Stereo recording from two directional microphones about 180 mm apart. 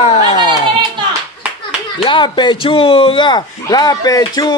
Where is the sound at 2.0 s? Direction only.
25° left (ahead or behind).